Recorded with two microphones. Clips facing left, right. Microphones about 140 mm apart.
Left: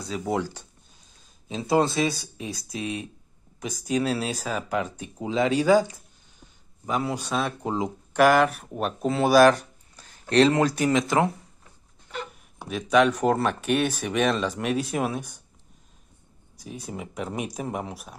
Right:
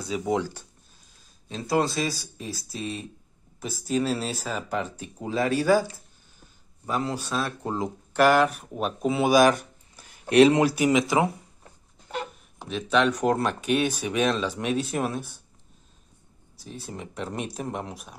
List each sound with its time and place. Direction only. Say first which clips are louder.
0.1 s speech: right 2 dB; centre (ahead or behind)
1.7 s speech: left 2 dB; 25° left (ahead or behind)
2.0 s speech: left 3 dB; centre (ahead or behind)
4.1 s speech: left 1 dB; 10° left (ahead or behind)
7.3 s speech: left 2 dB; centre (ahead or behind)
12.6 s speech: left 3 dB; 5° left (ahead or behind)
16.8 s speech: left 1 dB; 5° left (ahead or behind)